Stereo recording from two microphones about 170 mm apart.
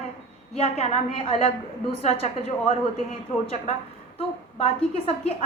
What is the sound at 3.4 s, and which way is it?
Speech, 40° left (ahead or behind).